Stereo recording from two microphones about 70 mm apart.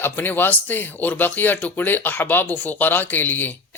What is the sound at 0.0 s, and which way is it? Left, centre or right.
Speech, left.